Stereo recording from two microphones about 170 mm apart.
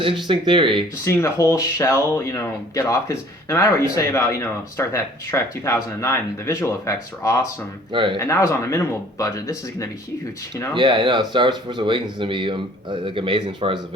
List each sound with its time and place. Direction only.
0.3 s speech: 30° right (ahead or behind)
1.0 s speech: 15° left (ahead or behind)
7.9 s speech: 30° right (ahead or behind)
8.2 s speech: 15° left (ahead or behind)
10.8 s speech: 30° right (ahead or behind)